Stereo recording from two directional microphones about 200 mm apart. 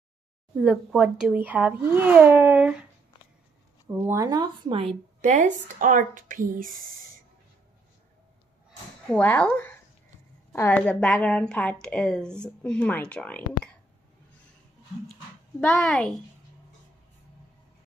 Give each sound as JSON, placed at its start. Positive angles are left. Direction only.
{"t": 0.6, "sound": "speech", "side_deg": -5}
{"t": 8.6, "sound": "a sound", "side_deg": 5}
{"t": 10.5, "sound": "a woman's voice", "side_deg": 10}
{"t": 15.6, "sound": "a woman's voice", "side_deg": 5}